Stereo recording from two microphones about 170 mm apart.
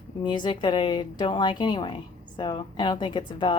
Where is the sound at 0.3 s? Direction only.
25° left (ahead or behind).